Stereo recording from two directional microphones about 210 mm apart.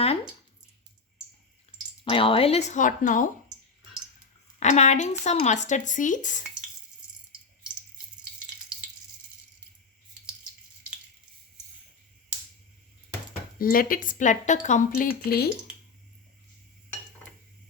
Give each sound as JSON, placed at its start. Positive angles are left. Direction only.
{"t": 2.0, "sound": "speech", "side_deg": 25}
{"t": 4.6, "sound": "speech", "side_deg": 35}
{"t": 13.6, "sound": "speech", "side_deg": 45}